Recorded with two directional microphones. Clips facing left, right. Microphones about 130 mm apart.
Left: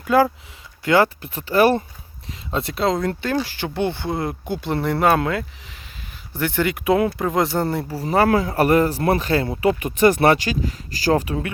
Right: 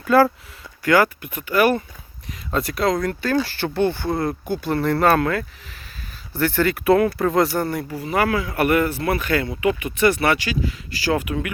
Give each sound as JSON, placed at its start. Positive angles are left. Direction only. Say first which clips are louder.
{"t": 0.1, "sound": "speech", "louder": "right 1 dB", "side_deg": 15}